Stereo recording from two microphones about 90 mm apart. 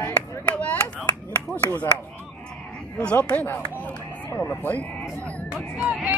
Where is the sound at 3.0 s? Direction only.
10° left (ahead or behind).